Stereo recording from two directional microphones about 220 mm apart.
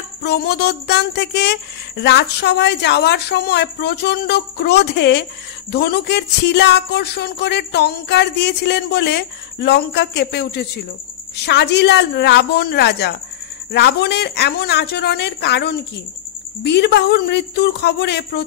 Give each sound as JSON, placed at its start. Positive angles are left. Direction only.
{"t": 0.2, "sound": "speech", "side_deg": 50}